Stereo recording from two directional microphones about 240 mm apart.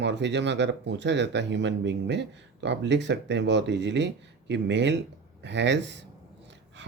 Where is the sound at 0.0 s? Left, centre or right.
Right.